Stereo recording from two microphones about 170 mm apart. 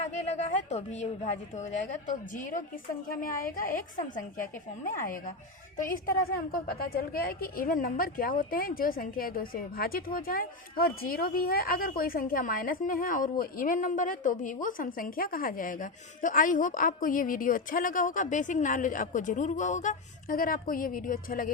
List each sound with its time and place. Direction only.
0.1 s a woman's voice: 45° left (ahead or behind)